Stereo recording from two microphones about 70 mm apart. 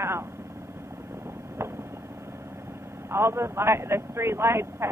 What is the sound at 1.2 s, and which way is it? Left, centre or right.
Vehicle, right.